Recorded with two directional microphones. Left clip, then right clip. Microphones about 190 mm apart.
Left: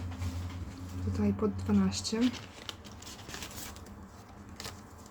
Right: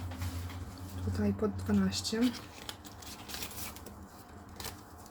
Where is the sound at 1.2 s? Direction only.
15° left (ahead or behind).